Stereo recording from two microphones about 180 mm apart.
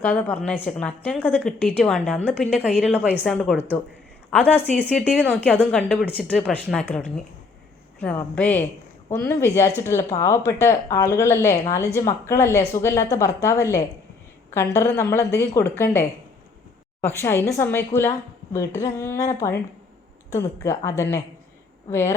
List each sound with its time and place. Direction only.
0.0 s a woman's voice: 10° left (ahead or behind)
2.8 s a woman's voice: 5° right (ahead or behind)
3.2 s a woman's voice: 5° left (ahead or behind)